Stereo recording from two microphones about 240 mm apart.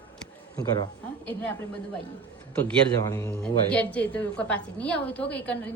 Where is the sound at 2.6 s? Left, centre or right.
Centre.